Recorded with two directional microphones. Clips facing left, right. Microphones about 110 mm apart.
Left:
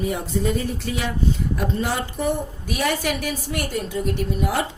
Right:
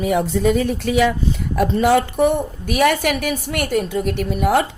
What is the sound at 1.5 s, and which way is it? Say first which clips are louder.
A woman's voice: right 9 dB; 75° right (ahead or behind).